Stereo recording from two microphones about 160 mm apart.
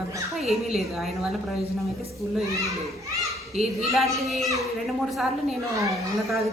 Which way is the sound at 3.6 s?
Centre (ahead or behind).